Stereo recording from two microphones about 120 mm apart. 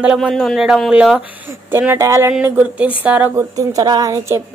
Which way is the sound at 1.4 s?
20° right (ahead or behind).